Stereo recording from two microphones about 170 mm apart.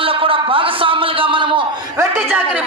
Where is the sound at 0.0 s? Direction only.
30° right (ahead or behind).